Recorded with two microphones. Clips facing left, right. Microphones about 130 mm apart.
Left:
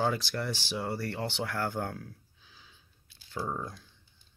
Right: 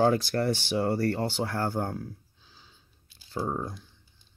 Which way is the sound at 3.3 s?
30° right (ahead or behind).